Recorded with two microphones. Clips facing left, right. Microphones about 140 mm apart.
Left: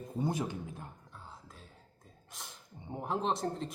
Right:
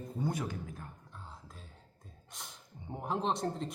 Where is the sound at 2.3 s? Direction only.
Centre (ahead or behind).